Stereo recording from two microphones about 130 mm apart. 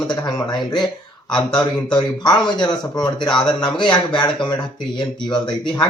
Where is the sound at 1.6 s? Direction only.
35° left (ahead or behind).